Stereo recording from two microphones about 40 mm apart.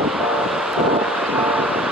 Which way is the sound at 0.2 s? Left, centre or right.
Centre.